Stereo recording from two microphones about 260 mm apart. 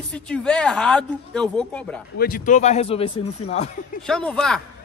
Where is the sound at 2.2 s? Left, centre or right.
Left.